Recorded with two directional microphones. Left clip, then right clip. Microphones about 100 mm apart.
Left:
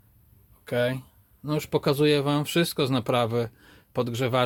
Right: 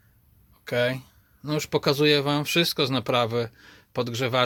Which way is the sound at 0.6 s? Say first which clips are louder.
Right 1 dB; centre (ahead or behind).